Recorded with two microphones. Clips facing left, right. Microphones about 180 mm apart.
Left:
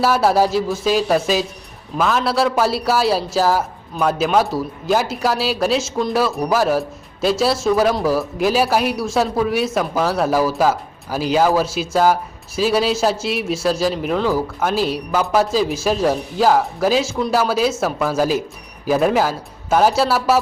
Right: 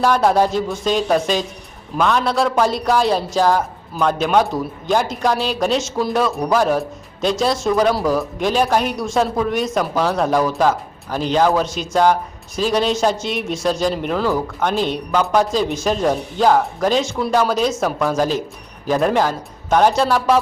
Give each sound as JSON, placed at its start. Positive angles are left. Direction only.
{"t": 0.0, "sound": "a man's voice", "side_deg": 5}